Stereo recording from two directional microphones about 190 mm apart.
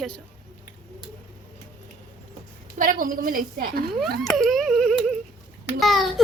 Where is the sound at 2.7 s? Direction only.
45° right (ahead or behind).